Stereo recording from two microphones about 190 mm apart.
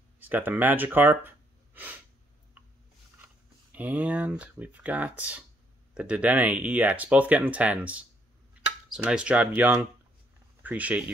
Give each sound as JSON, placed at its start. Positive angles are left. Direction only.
{"t": 0.2, "sound": "speech", "side_deg": -10}
{"t": 3.7, "sound": "speech", "side_deg": -10}